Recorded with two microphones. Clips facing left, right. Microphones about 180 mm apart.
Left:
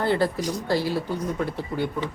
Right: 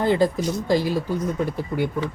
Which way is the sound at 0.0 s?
15° right (ahead or behind).